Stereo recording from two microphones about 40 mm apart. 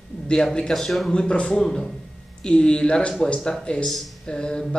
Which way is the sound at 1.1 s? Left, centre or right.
Left.